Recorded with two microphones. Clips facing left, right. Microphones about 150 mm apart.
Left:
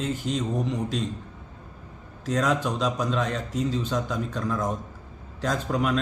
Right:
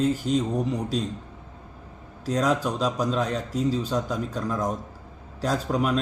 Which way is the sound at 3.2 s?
35° right (ahead or behind).